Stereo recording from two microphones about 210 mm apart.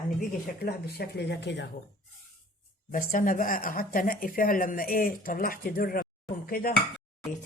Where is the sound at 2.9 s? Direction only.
40° left (ahead or behind).